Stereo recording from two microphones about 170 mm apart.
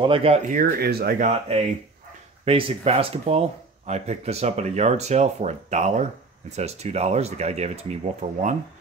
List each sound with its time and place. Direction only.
0.0 s speech: 30° right (ahead or behind)
0.5 s speech: 60° right (ahead or behind)
1.2 s speech: 40° right (ahead or behind)